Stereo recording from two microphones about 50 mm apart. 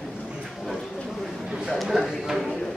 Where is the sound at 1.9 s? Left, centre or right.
Centre.